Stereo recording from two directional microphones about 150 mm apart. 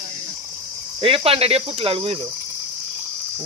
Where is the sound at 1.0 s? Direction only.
40° right (ahead or behind).